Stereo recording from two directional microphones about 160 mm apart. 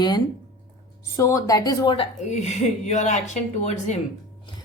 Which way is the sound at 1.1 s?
20° left (ahead or behind).